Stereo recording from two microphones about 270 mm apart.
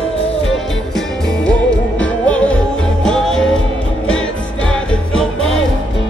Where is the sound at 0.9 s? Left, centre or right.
Centre.